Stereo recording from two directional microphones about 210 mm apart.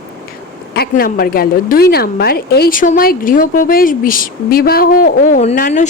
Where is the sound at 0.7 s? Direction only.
45° left (ahead or behind).